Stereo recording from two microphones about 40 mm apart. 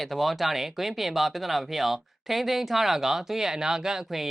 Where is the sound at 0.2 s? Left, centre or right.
Centre.